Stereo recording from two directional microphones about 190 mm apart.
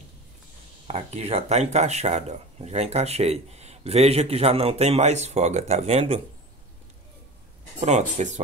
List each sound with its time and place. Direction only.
0.8 s speech: 30° right (ahead or behind)
7.8 s speech: 40° right (ahead or behind)